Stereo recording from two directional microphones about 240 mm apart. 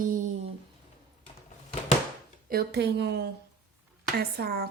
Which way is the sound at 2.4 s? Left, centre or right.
Right.